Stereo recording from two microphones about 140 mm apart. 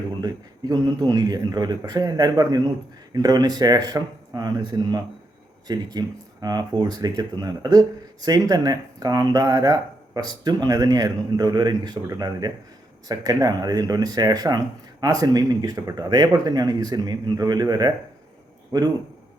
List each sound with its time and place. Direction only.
0.2 s speech: 25° right (ahead or behind)